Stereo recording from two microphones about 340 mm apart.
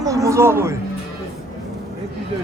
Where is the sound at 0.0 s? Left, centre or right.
Centre.